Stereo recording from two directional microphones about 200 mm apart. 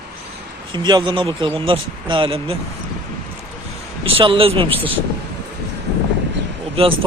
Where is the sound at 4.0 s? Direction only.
25° right (ahead or behind).